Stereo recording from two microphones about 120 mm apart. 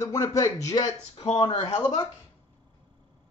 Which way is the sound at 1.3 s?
45° left (ahead or behind).